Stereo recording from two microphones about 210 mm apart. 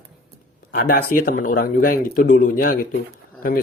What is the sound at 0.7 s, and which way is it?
Speech, 45° left (ahead or behind).